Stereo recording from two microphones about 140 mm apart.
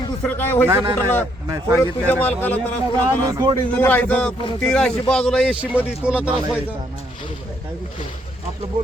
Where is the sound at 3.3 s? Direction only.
25° right (ahead or behind).